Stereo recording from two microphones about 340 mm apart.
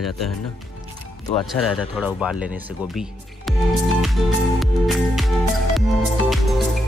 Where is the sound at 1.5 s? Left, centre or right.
Centre.